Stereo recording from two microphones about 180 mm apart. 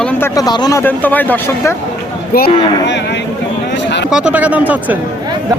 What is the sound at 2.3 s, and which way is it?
Speech, 55° left (ahead or behind).